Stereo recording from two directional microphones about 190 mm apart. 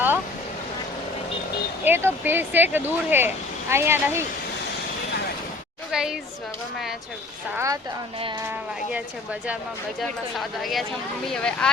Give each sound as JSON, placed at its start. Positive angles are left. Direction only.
{"t": 1.8, "sound": "speech", "side_deg": -10}
{"t": 5.9, "sound": "a woman's voice", "side_deg": -5}
{"t": 7.5, "sound": "speech", "side_deg": -15}
{"t": 10.0, "sound": "a woman's voice", "side_deg": 0}